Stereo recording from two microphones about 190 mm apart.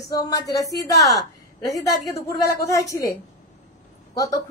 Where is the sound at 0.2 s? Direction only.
20° left (ahead or behind).